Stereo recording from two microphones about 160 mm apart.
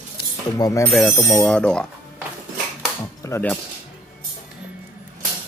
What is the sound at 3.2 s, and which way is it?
Speech, 15° left (ahead or behind).